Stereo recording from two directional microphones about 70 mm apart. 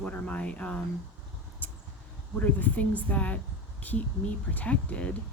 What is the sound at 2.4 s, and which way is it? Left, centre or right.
Speech, left.